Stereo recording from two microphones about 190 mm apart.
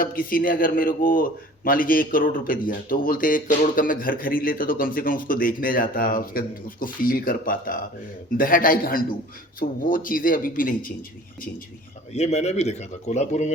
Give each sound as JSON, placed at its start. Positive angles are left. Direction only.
{"t": 0.0, "sound": "a man's voice", "side_deg": 50}
{"t": 12.1, "sound": "speech", "side_deg": 35}